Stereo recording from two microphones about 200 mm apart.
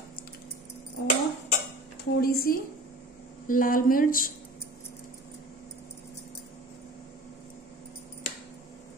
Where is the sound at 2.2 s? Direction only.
50° left (ahead or behind).